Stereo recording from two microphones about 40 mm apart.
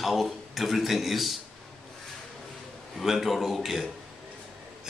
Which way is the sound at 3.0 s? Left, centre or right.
Centre.